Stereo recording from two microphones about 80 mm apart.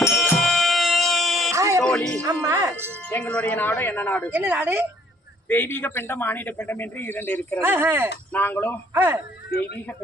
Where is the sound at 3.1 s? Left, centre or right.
Centre.